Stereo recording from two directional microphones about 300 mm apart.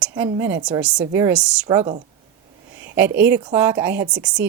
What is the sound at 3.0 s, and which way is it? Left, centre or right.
Speech, centre.